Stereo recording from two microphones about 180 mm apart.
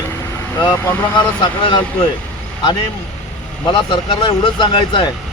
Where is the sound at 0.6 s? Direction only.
25° left (ahead or behind).